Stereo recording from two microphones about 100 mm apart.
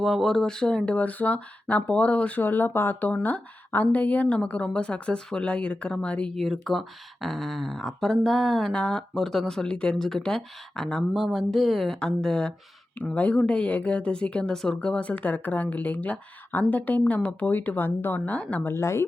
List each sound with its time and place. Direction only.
0.0 s speech: centre (ahead or behind); by 19.0 s 25° left (ahead or behind)